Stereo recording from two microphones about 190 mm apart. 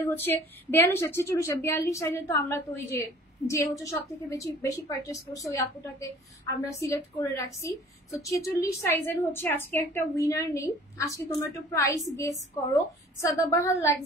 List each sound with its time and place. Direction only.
0.0 s a woman's voice: 10° left (ahead or behind)